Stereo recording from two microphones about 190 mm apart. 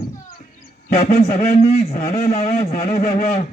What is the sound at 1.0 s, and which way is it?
A man's voice, 35° left (ahead or behind).